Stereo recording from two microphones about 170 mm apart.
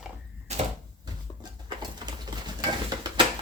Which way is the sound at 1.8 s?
25° right (ahead or behind).